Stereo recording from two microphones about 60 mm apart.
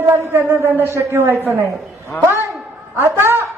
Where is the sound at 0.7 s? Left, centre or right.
Right.